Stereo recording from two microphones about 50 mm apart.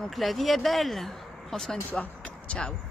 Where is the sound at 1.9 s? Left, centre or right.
Left.